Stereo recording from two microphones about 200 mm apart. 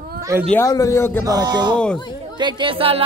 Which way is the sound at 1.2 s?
20° right (ahead or behind).